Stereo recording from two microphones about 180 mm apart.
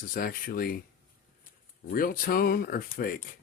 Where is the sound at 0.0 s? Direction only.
50° left (ahead or behind).